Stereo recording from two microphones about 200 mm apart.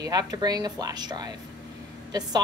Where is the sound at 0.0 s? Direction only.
20° right (ahead or behind).